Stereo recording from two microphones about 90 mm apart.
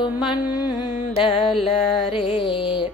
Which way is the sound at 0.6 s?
50° left (ahead or behind).